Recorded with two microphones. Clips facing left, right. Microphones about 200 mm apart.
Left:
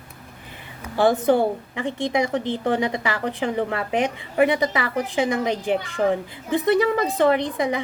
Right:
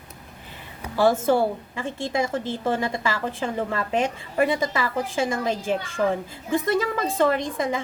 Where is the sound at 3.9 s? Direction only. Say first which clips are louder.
Left 2 dB; 20° left (ahead or behind).